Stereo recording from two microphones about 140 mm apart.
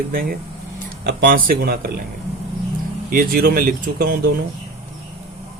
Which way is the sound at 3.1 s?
90° right.